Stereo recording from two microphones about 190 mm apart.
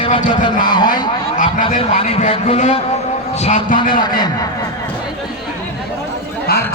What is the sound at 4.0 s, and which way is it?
Speech, 20° left (ahead or behind).